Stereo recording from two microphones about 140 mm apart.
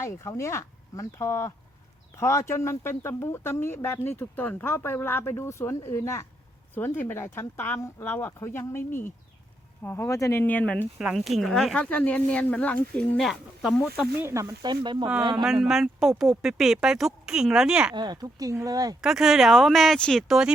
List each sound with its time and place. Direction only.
0.0 s speech: 20° left (ahead or behind)
10.9 s speech: centre (ahead or behind)
14.2 s speech: 20° right (ahead or behind)
14.7 s speech: 35° right (ahead or behind)
15.6 s speech: 5° right (ahead or behind)
17.9 s speech: 30° right (ahead or behind)
19.0 s speech: 5° right (ahead or behind)